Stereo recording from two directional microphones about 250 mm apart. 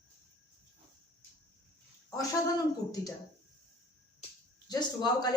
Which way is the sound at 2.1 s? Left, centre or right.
Centre.